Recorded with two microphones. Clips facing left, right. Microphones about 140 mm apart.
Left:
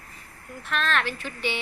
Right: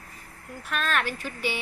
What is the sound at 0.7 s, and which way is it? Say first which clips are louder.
Speech: left 1 dB; 10° right (ahead or behind).